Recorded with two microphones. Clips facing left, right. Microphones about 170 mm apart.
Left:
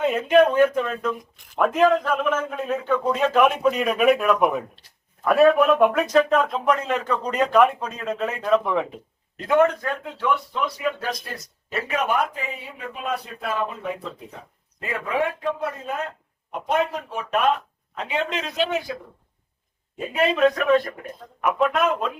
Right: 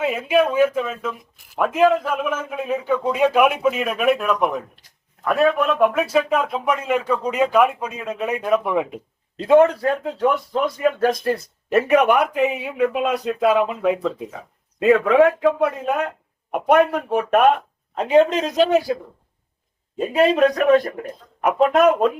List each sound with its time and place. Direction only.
0.0 s a man's voice: 5° right (ahead or behind)
9.4 s speech: 30° right (ahead or behind); by 17.5 s 55° right (ahead or behind)
17.9 s speech: 45° right (ahead or behind)
20.1 s speech: 35° right (ahead or behind)